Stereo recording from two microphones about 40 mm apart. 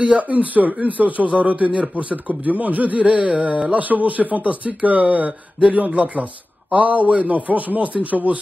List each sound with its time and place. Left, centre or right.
0.0 s speech: right
3.7 s speech: right